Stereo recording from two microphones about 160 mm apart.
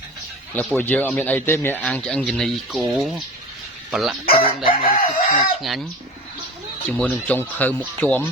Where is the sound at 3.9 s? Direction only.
Centre (ahead or behind).